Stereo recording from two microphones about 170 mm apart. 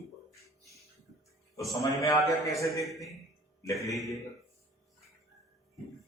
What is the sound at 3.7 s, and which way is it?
Speech, centre (ahead or behind).